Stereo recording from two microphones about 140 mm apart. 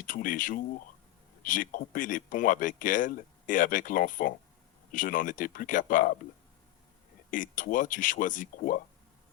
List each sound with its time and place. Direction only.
0.0 s speech: 75° left (ahead or behind)
7.3 s speech: 70° left (ahead or behind)